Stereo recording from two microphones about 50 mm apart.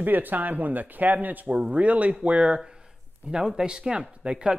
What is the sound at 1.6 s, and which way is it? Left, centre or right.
Speech, right.